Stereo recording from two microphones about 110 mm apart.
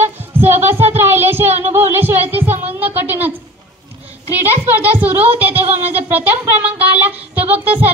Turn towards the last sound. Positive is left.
turn(degrees=-15)  # may be behind; listen again after turning